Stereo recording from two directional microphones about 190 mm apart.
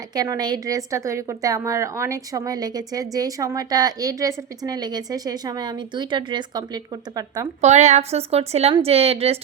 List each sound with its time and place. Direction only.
0.1 s a woman's voice: 20° right (ahead or behind)
7.6 s a woman's voice: 35° right (ahead or behind)